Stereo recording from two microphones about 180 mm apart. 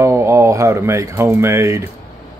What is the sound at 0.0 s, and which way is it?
Speech, 15° right (ahead or behind).